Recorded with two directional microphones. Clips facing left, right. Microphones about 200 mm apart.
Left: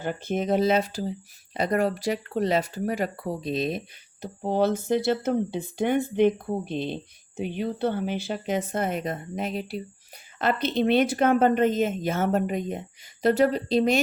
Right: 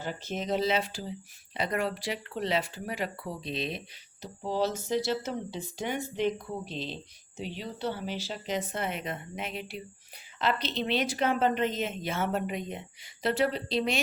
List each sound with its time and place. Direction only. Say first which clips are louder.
0.0 s speech: left 7 dB; 55° left (ahead or behind); by 9.8 s 40° left (ahead or behind)
10.3 s speech: left 6 dB; 50° left (ahead or behind)